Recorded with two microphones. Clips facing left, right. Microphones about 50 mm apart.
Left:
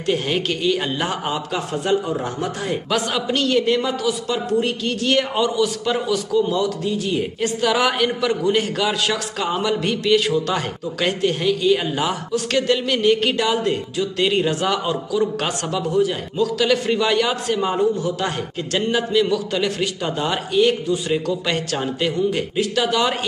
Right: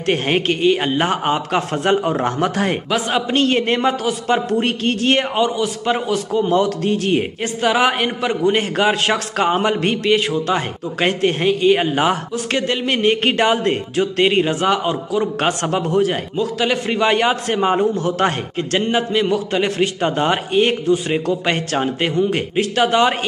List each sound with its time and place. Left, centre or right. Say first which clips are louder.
0.0 s a man's voice: right 3 dB; right
3.1 s speech: right 6 dB; right
5.3 s speech: right 1 dB; right
6.4 s a man's voice: right 4 dB; right
7.4 s speech: right 1 dB; right
10.0 s speech: even; right
16.3 s a man's voice: left 3 dB; right
18.8 s speech: even; right